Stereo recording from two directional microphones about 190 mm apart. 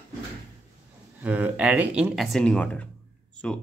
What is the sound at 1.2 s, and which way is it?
Speech, 10° right (ahead or behind).